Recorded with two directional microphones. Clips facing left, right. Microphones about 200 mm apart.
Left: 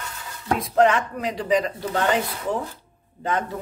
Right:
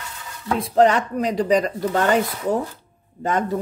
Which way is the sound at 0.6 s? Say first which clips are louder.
Right 3 dB; 35° right (ahead or behind).